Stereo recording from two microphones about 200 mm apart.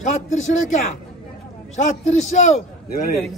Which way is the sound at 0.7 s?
40° left (ahead or behind).